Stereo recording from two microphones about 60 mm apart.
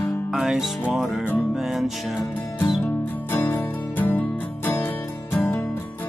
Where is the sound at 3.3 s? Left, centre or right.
Left.